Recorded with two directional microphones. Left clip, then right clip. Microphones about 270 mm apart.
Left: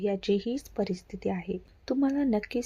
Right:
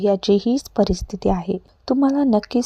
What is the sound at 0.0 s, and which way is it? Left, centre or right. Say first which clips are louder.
A woman's voice: right 11 dB; right.